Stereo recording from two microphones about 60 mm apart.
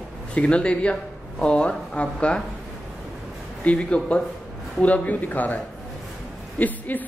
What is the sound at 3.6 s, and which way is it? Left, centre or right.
A man's voice, left.